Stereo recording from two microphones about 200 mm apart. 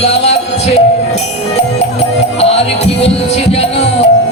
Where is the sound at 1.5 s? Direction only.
35° left (ahead or behind).